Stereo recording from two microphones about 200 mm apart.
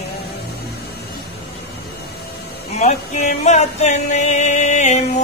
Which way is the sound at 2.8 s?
35° left (ahead or behind).